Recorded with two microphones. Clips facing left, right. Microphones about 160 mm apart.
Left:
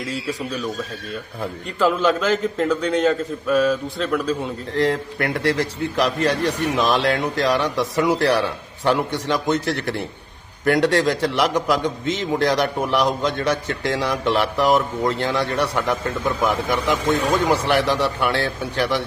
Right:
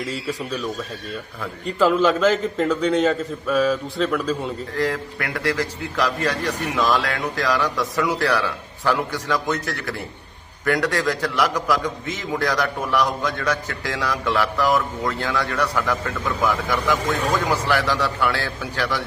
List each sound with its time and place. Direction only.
1.8 s a man's voice: centre (ahead or behind)
4.7 s a man's voice: 25° left (ahead or behind)